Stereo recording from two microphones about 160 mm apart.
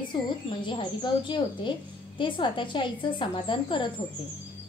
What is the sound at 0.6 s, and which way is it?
A woman's voice, 30° left (ahead or behind).